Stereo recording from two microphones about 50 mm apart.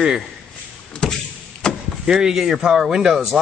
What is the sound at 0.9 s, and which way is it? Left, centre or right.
Door, centre.